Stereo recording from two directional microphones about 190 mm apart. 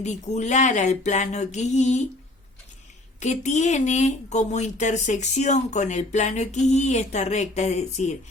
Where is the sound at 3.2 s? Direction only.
40° left (ahead or behind).